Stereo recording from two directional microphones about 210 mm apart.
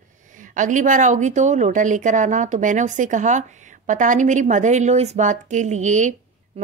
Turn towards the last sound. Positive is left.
turn(degrees=-35)  # may be behind; listen again after turning